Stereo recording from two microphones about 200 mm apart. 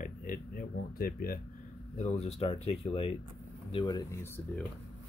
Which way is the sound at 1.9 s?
35° left (ahead or behind).